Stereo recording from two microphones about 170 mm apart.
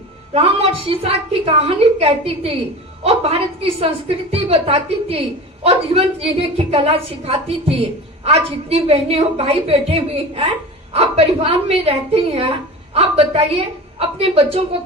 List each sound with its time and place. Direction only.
0.3 s a woman's voice: 35° right (ahead or behind)